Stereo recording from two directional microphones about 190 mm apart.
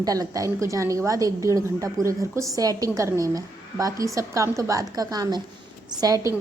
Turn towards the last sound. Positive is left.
turn(degrees=-20)  # may be behind; listen again after turning